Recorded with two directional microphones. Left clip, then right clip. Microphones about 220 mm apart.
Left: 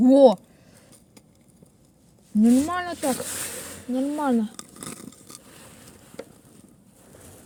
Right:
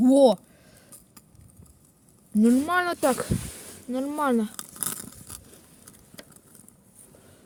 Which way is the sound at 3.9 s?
25° right (ahead or behind).